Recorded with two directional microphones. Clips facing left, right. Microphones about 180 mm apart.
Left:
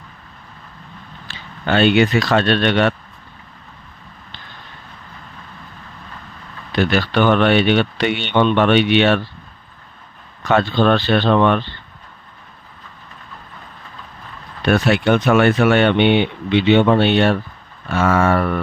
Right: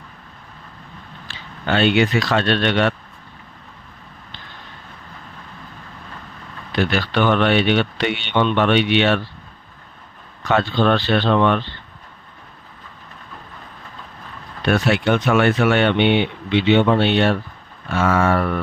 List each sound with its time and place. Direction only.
1.6 s speech: 50° left (ahead or behind)
6.7 s speech: 50° left (ahead or behind)
10.5 s speech: 50° left (ahead or behind)
14.7 s speech: 45° left (ahead or behind)